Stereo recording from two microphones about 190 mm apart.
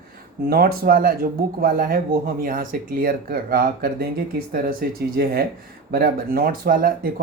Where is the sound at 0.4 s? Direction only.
50° right (ahead or behind).